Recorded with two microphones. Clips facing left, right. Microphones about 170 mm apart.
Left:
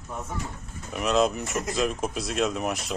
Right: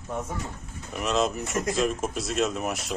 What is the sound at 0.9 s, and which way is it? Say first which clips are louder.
Speech: left 2 dB; centre (ahead or behind).